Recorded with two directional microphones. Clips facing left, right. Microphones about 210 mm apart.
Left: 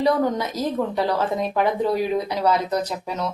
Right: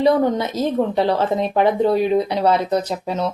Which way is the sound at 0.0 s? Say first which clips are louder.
Right 4 dB; 25° right (ahead or behind).